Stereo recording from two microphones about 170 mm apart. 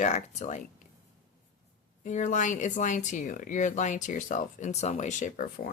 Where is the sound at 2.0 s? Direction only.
45° left (ahead or behind).